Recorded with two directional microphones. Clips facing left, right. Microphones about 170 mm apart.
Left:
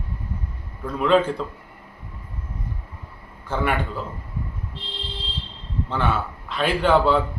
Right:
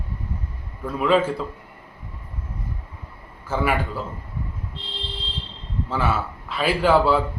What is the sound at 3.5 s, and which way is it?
Speech, 5° right (ahead or behind).